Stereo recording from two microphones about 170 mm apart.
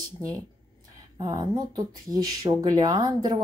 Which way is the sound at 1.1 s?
25° right (ahead or behind).